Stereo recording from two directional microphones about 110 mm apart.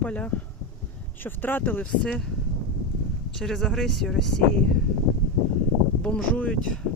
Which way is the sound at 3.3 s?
5° left (ahead or behind).